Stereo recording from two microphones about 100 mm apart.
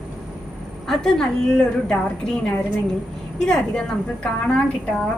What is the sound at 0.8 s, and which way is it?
A woman's voice, 5° left (ahead or behind).